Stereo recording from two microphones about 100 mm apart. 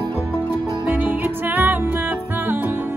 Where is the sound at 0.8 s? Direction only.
15° right (ahead or behind).